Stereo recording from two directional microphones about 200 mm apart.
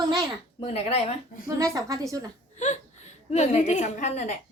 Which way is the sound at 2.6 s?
35° left (ahead or behind).